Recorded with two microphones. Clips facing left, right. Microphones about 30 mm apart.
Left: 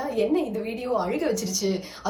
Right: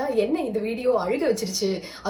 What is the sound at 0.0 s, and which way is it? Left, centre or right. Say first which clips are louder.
A woman's voice: right 1 dB; right.